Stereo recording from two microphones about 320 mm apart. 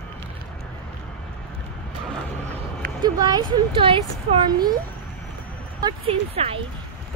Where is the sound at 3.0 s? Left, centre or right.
Centre.